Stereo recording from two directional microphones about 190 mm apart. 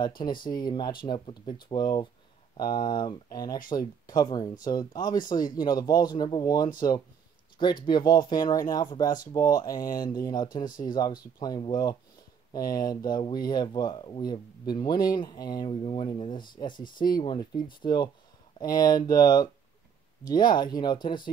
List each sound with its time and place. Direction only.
0.2 s speech: 25° left (ahead or behind)
7.8 s speech: 20° left (ahead or behind)